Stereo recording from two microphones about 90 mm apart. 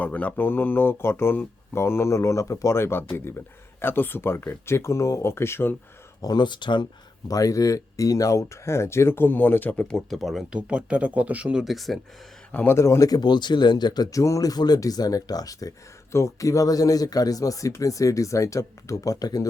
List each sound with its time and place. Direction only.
0.0 s speech: 15° left (ahead or behind)
6.2 s speech: 55° left (ahead or behind)
7.3 s speech: 40° left (ahead or behind); by 10.4 s centre (ahead or behind)
10.5 s speech: 10° right (ahead or behind)
11.6 s speech: centre (ahead or behind)
12.5 s a man's voice: 20° left (ahead or behind)
12.7 s speech: 30° left (ahead or behind)